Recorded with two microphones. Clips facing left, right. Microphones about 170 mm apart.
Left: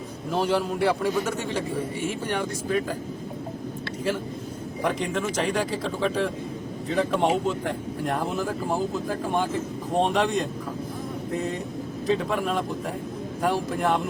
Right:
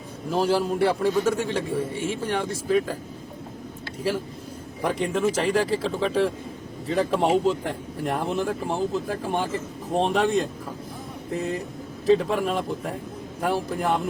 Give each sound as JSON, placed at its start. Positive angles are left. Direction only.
{"t": 0.3, "sound": "a man's voice", "side_deg": -30}
{"t": 0.8, "sound": "speech", "side_deg": 0}
{"t": 4.8, "sound": "speech", "side_deg": 0}